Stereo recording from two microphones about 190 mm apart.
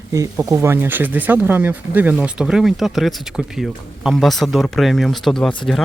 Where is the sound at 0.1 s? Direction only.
15° right (ahead or behind).